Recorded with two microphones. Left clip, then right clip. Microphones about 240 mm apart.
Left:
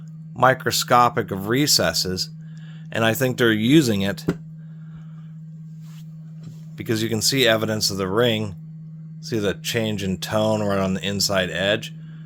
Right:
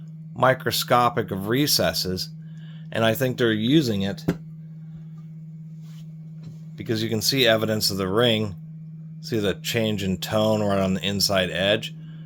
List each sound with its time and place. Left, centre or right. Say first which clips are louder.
0.3 s speech: left 3 dB; centre; by 4.2 s left
6.7 s speech: left 2 dB; left